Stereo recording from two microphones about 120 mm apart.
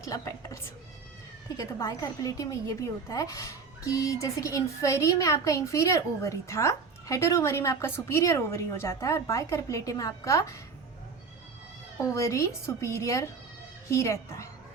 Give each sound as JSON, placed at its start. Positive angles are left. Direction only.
{"t": 0.0, "sound": "a woman's voice", "side_deg": 25}
{"t": 12.0, "sound": "a woman's voice", "side_deg": 25}